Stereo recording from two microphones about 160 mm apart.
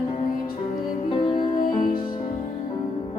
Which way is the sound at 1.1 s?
30° left (ahead or behind).